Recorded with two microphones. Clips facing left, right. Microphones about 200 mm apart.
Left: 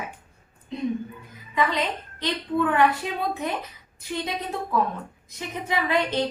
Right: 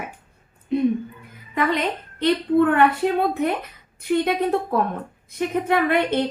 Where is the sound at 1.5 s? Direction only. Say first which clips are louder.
Right 3 dB; 55° right (ahead or behind).